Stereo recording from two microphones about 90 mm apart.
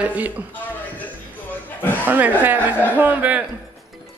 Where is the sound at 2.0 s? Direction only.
20° right (ahead or behind).